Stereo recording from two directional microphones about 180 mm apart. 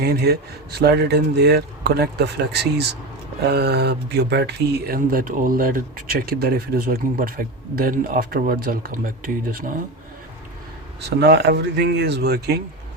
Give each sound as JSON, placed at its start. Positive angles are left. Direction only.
{"t": 0.0, "sound": "speech", "side_deg": -60}
{"t": 11.2, "sound": "speech", "side_deg": -65}